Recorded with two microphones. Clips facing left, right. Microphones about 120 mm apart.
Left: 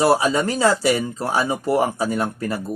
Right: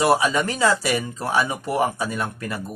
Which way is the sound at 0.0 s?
35° left (ahead or behind).